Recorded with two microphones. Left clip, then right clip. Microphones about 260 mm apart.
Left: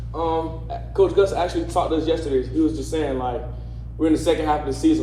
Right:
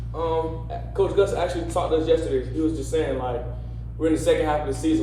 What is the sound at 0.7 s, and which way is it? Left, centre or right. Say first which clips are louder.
A man's voice: left 4 dB; left.